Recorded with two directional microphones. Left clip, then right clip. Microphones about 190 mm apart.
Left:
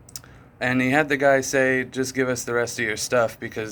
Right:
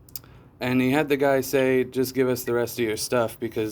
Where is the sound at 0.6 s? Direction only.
35° right (ahead or behind).